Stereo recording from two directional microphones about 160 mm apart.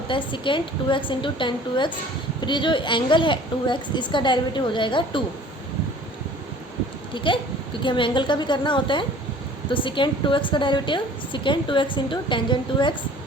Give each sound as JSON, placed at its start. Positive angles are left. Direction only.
{"t": 0.1, "sound": "a woman's voice", "side_deg": 30}
{"t": 7.3, "sound": "a woman's voice", "side_deg": 30}